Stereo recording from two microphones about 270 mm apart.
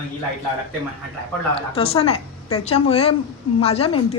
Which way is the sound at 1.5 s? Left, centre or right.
Left.